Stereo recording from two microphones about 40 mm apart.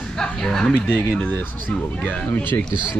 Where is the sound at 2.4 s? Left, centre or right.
Left.